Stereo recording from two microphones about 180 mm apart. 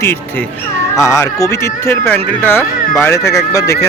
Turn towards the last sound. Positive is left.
turn(degrees=15)  # may be behind; listen again after turning